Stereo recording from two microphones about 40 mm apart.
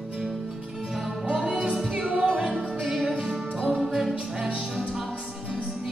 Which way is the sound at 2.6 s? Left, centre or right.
Centre.